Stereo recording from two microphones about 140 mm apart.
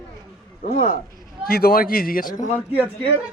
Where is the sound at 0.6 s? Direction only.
70° left (ahead or behind).